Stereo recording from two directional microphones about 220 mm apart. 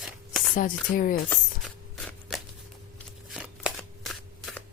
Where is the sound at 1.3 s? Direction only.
5° left (ahead or behind).